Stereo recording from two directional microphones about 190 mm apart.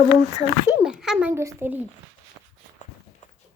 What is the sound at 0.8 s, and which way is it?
Speech, 5° right (ahead or behind).